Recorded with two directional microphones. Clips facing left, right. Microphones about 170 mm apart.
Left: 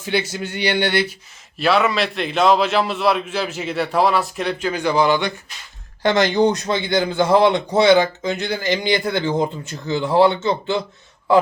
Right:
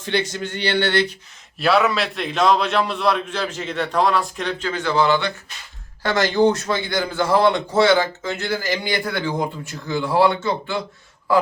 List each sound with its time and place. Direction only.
0.0 s speech: 5° left (ahead or behind)
1.5 s a man's voice: centre (ahead or behind); by 10.8 s 20° left (ahead or behind)